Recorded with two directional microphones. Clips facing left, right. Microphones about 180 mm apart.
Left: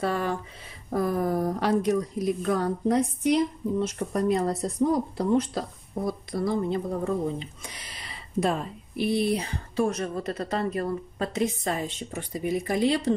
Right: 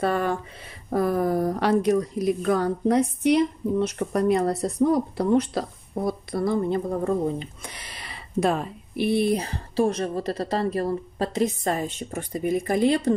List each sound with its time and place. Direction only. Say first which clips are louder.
0.0 s a sound: right 3 dB; 55° right (ahead or behind)
0.8 s a woman's voice: right 3 dB; 65° right (ahead or behind)
6.0 s a woman's voice: right 3 dB; 55° right (ahead or behind)
7.9 s speech: right 2 dB; 65° right (ahead or behind)